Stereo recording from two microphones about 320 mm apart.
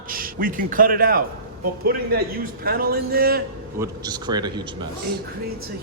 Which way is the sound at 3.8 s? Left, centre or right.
Centre.